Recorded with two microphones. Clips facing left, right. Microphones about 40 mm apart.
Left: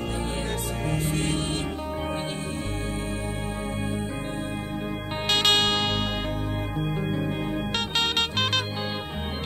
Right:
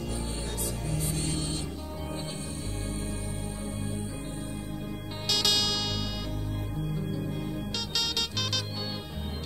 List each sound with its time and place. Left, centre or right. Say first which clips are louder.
0.8 s music: left 7 dB; left
5.3 s music: left 6 dB; left